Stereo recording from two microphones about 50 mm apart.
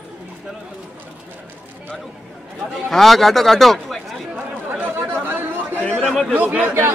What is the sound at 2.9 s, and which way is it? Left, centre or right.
Speech, centre.